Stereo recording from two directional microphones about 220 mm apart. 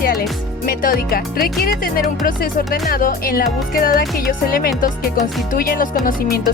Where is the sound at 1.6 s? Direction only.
40° left (ahead or behind).